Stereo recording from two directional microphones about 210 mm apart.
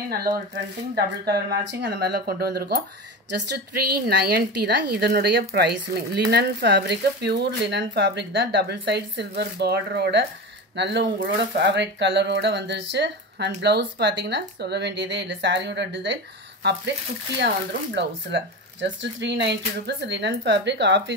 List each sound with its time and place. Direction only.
0.9 s a woman's voice: 50° right (ahead or behind)
17.9 s speech: 55° right (ahead or behind)